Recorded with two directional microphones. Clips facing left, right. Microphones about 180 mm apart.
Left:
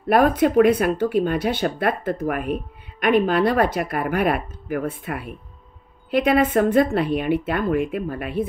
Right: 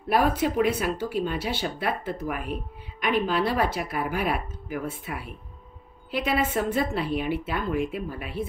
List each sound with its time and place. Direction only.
0.1 s speech: 55° left (ahead or behind)